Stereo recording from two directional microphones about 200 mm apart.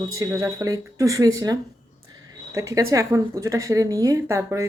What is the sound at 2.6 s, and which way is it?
Speech, 15° right (ahead or behind).